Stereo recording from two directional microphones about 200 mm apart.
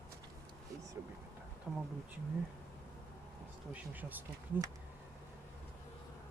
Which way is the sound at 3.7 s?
10° right (ahead or behind).